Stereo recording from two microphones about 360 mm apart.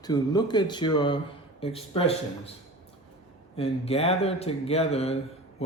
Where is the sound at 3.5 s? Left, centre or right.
Centre.